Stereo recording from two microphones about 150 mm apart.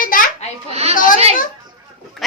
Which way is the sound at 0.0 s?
65° left (ahead or behind).